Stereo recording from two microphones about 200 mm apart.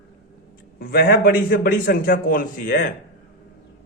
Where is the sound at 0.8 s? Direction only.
50° left (ahead or behind).